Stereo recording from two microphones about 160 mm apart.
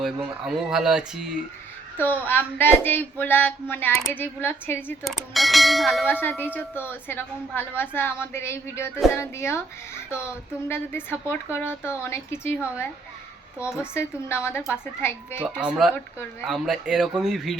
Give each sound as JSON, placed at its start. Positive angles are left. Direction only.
{"t": 0.7, "sound": "speech", "side_deg": -5}
{"t": 2.0, "sound": "a woman's voice", "side_deg": 10}
{"t": 5.0, "sound": "speech", "side_deg": 0}
{"t": 6.1, "sound": "a woman's voice", "side_deg": 10}
{"t": 15.4, "sound": "speech", "side_deg": -5}